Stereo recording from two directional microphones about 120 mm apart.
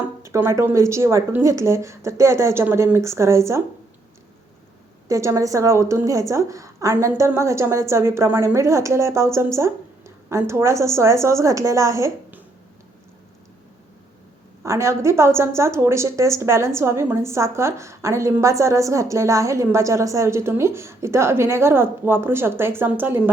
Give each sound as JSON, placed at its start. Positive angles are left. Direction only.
{"t": 0.2, "sound": "a woman's voice", "side_deg": -20}
{"t": 5.0, "sound": "a woman's voice", "side_deg": -25}
{"t": 14.6, "sound": "a woman's voice", "side_deg": -25}